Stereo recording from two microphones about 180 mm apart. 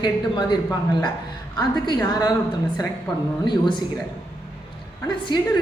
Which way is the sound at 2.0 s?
20° left (ahead or behind).